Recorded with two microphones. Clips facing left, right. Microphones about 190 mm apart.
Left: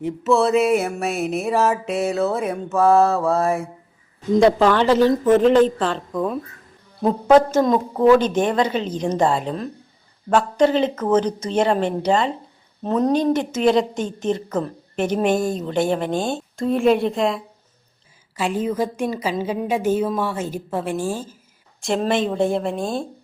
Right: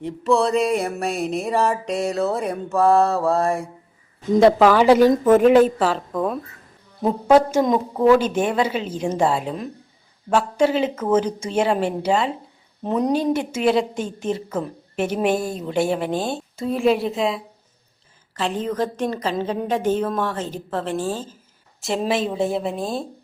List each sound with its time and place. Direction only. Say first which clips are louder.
0.0 s a woman's voice: left 1 dB; centre (ahead or behind)
7.1 s a woman's voice: left 1 dB; 10° right (ahead or behind)
18.3 s a woman's voice: left 1 dB; 10° left (ahead or behind)
21.8 s a woman's voice: left 2 dB; 5° right (ahead or behind)